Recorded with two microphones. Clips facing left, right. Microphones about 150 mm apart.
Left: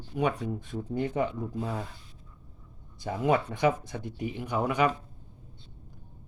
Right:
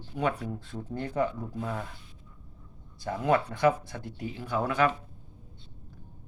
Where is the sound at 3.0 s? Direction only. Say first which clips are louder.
Even; 15° left (ahead or behind).